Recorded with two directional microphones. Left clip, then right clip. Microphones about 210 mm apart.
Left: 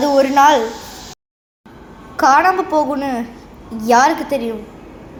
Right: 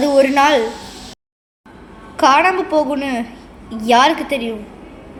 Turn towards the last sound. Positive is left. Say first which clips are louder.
# even
turn(degrees=-10)  # may be behind; listen again after turning